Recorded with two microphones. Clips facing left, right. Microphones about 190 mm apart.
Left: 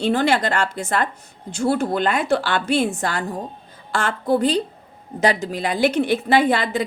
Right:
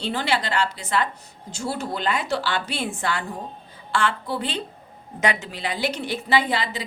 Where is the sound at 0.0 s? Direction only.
50° left (ahead or behind).